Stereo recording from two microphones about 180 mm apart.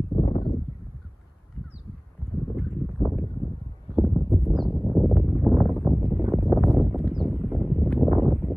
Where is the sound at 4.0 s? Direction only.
5° right (ahead or behind).